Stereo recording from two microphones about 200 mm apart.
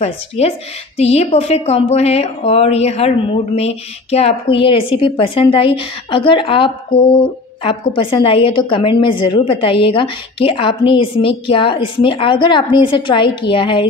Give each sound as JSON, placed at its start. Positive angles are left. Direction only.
{"t": 0.0, "sound": "a woman's voice", "side_deg": 30}